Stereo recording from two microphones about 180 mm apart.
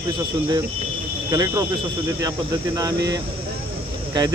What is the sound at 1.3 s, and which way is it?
Speech, 20° right (ahead or behind).